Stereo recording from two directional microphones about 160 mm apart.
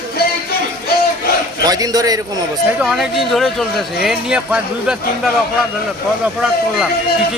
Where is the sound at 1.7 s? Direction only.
20° right (ahead or behind).